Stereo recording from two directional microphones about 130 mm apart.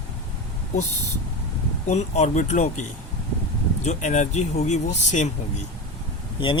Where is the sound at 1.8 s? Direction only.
60° left (ahead or behind).